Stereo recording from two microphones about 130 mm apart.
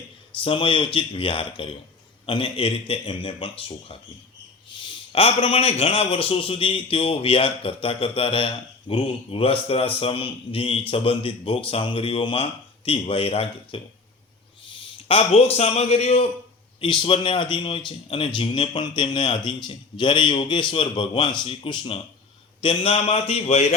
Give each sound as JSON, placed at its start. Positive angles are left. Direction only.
{"t": 0.4, "sound": "a man's voice", "side_deg": 40}
{"t": 16.8, "sound": "a man's voice", "side_deg": 40}